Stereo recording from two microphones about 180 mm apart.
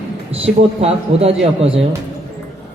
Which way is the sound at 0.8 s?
35° right (ahead or behind).